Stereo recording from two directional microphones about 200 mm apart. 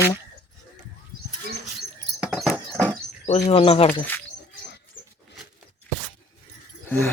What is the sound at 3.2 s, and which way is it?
Speech, 35° left (ahead or behind).